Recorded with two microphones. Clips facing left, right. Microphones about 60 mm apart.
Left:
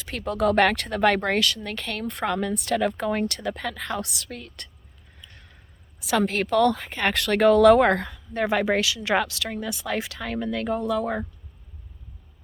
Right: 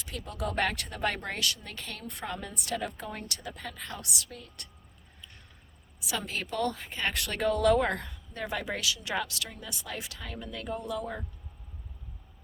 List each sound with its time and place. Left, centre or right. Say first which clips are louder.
0.0 s speech: left 12 dB; left
4.3 s speech: left 8 dB; left
6.1 s speech: left 12 dB; left
8.4 s speech: left 10 dB; left